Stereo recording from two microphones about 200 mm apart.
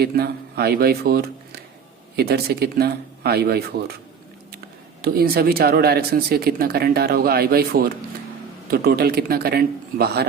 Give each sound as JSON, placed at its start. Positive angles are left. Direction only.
{"t": 0.0, "sound": "speech", "side_deg": -50}
{"t": 5.0, "sound": "speech", "side_deg": -50}